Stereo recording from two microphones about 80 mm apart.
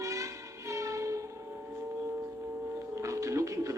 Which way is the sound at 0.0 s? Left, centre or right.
Right.